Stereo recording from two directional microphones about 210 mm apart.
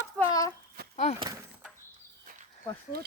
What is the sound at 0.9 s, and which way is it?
Speech, 30° left (ahead or behind).